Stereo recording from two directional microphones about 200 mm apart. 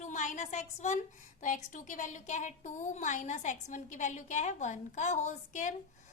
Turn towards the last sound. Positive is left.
turn(degrees=35)  # may be behind; listen again after turning